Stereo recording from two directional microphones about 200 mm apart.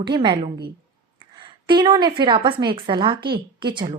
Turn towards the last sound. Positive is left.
turn(degrees=-25)  # may be behind; listen again after turning